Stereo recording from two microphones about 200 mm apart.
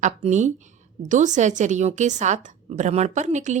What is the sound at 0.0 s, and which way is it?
A woman's voice, 35° right (ahead or behind).